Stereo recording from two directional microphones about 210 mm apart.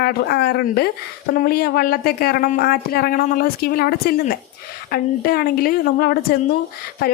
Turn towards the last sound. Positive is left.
turn(degrees=45)  # may be behind; listen again after turning